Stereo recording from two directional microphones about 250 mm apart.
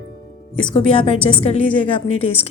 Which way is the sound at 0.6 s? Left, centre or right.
Left.